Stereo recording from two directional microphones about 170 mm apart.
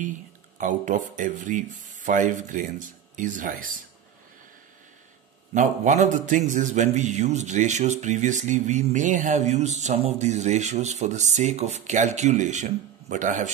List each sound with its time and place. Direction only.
0.6 s a man's voice: 50° right (ahead or behind)
5.5 s a man's voice: 45° right (ahead or behind)